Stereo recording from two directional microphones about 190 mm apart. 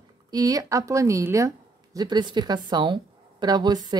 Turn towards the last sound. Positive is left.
turn(degrees=-20)  # may be behind; listen again after turning